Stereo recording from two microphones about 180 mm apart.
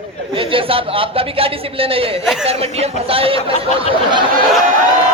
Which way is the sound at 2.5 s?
35° right (ahead or behind).